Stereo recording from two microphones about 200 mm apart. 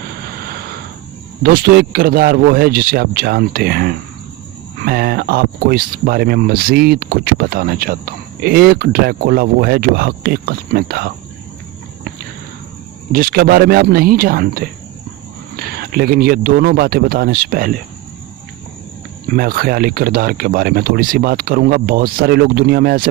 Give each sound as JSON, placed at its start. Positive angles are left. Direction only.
{"t": 0.2, "sound": "vehicle", "side_deg": -50}
{"t": 1.4, "sound": "speech", "side_deg": -50}
{"t": 13.1, "sound": "speech", "side_deg": -45}
{"t": 19.3, "sound": "speech", "side_deg": -50}